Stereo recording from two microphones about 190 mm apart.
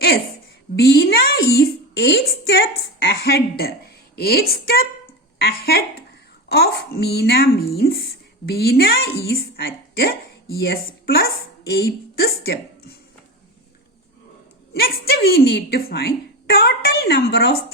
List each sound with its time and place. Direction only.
0.8 s a woman's voice: 60° left (ahead or behind)
14.7 s speech: 55° left (ahead or behind)